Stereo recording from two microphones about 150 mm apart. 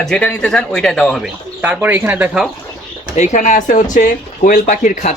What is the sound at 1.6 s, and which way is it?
Speech, 10° right (ahead or behind).